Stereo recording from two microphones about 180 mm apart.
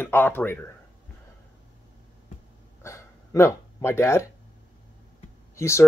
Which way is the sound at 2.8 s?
15° left (ahead or behind).